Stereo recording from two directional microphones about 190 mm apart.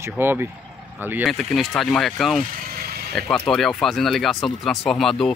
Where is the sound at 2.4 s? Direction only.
45° right (ahead or behind).